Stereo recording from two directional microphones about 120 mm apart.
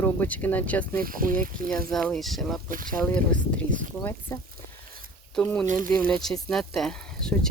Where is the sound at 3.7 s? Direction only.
90° right.